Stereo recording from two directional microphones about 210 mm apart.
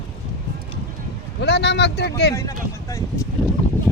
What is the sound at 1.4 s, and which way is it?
Speech, 55° left (ahead or behind).